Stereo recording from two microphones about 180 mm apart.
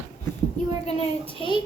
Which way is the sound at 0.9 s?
30° left (ahead or behind).